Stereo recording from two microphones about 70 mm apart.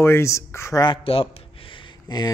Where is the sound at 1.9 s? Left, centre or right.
Left.